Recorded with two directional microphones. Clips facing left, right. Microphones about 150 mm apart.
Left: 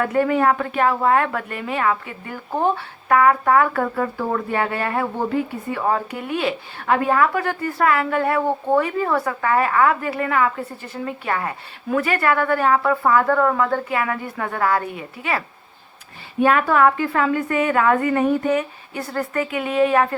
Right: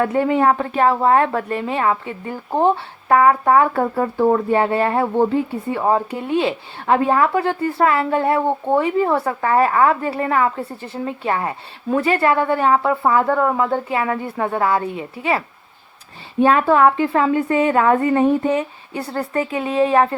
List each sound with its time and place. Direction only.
0.0 s a woman's voice: 25° right (ahead or behind)